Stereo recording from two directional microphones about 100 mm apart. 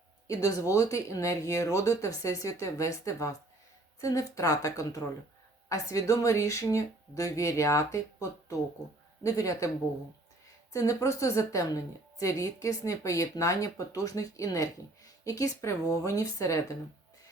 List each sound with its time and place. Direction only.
0.3 s a woman's voice: 35° left (ahead or behind)
10.7 s a woman's voice: 35° left (ahead or behind)